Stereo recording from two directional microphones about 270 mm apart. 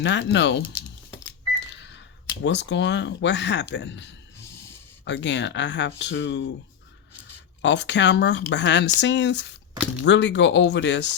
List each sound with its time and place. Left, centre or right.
0.0 s speech: left
1.5 s cash register: left
2.4 s speech: left
4.4 s a sound: left
5.0 s speech: left
7.6 s speech: left